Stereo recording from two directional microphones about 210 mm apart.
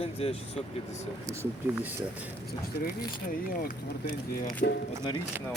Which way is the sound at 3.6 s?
40° left (ahead or behind).